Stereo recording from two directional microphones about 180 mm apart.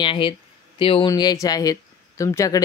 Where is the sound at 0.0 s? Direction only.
25° left (ahead or behind).